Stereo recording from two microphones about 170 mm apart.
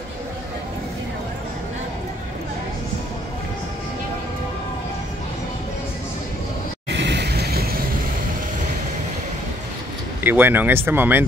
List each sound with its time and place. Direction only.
6.9 s vehicle: 90° right; by 7.8 s 65° right (ahead or behind)
10.2 s speech: 10° right (ahead or behind)